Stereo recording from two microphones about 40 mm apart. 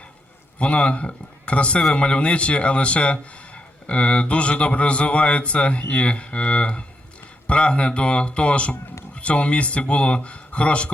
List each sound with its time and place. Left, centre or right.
0.6 s a man's voice: left